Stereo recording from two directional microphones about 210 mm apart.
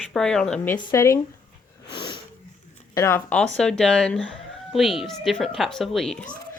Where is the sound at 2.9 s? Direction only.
15° left (ahead or behind).